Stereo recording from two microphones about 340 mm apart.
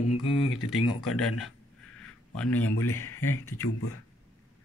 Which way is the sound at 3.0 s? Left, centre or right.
Centre.